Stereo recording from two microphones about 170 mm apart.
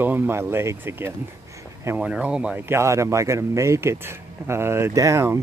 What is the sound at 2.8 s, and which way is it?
Speech, 15° right (ahead or behind).